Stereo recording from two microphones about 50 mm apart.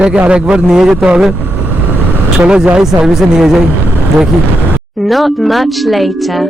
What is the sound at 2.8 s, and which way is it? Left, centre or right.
Speech, centre.